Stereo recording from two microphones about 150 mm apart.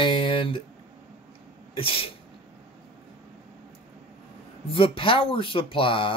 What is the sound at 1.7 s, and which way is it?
Speech, 35° left (ahead or behind).